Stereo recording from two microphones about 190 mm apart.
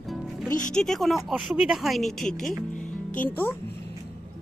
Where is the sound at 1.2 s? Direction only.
Centre (ahead or behind).